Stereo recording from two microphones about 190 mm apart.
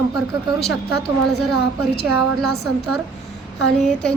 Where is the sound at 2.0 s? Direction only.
60° left (ahead or behind).